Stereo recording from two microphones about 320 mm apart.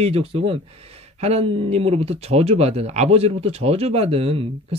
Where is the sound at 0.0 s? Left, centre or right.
Centre.